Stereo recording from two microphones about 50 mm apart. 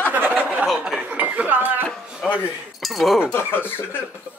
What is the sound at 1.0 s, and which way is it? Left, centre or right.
Speech, right.